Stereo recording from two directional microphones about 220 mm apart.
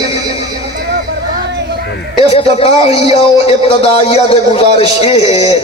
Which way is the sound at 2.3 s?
25° left (ahead or behind).